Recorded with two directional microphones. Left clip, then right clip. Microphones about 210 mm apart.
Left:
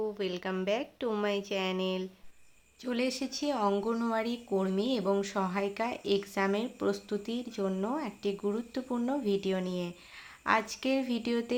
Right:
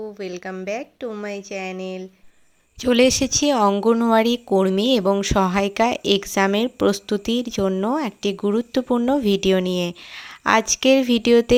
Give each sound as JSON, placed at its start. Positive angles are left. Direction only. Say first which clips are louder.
{"t": 0.2, "sound": "a woman's voice", "louder": "right 4 dB", "side_deg": -15}
{"t": 2.8, "sound": "a woman's voice", "louder": "right 16 dB", "side_deg": -45}